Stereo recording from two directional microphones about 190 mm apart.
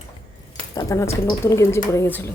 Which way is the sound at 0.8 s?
15° left (ahead or behind).